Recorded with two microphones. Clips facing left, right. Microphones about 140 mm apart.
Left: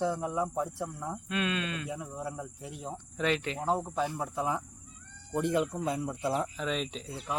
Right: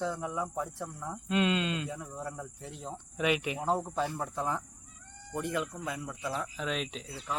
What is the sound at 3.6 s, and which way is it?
Cricket, centre (ahead or behind).